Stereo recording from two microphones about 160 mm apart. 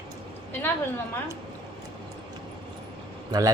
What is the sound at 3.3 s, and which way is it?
Speech, 20° right (ahead or behind).